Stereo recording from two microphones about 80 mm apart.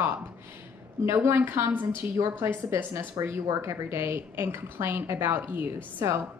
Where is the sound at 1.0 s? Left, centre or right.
Right.